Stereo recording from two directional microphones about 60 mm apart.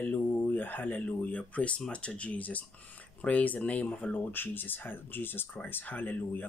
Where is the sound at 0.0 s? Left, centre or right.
Left.